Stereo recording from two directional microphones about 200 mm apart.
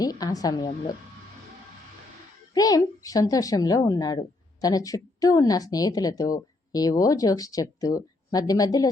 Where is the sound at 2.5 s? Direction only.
20° left (ahead or behind).